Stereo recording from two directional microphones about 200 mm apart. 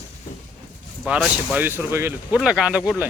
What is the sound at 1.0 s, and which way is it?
Speech, 5° right (ahead or behind).